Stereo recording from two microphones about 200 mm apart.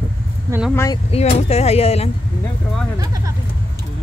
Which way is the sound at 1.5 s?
30° left (ahead or behind).